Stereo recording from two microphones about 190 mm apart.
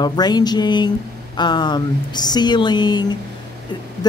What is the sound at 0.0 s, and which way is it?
Speech, 20° left (ahead or behind).